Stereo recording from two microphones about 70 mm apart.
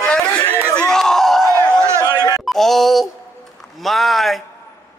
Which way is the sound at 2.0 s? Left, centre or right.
Left.